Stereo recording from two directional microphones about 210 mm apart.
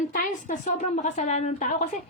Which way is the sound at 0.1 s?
40° left (ahead or behind).